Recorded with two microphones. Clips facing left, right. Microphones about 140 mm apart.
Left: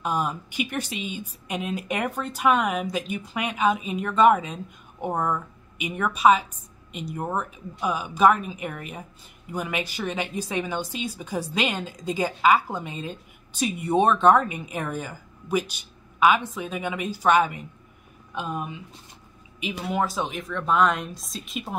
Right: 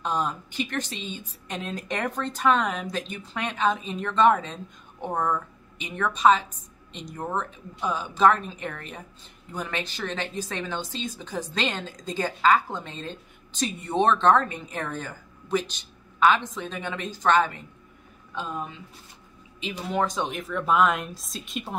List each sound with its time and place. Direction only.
0.0 s a woman's voice: 10° left (ahead or behind)